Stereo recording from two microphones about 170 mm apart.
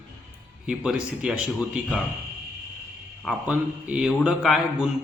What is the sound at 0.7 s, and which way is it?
Speech, 5° right (ahead or behind).